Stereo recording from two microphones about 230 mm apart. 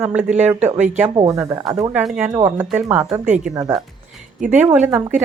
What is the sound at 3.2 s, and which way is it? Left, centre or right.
Speech, right.